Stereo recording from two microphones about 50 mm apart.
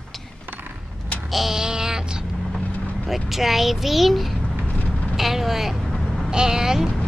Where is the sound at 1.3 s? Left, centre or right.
Centre.